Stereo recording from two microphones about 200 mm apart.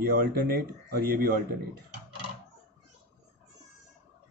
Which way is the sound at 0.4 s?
50° right (ahead or behind).